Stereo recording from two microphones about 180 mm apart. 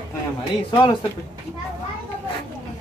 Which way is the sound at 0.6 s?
20° left (ahead or behind).